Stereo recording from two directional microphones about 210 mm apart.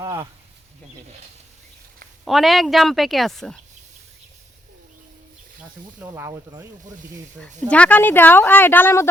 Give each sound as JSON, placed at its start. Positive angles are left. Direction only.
{"t": 0.0, "sound": "speech", "side_deg": -20}
{"t": 2.2, "sound": "a woman's voice", "side_deg": 0}
{"t": 6.0, "sound": "speech", "side_deg": -15}
{"t": 7.7, "sound": "speech", "side_deg": 5}